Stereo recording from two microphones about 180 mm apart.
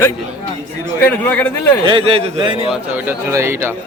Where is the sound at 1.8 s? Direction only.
25° right (ahead or behind).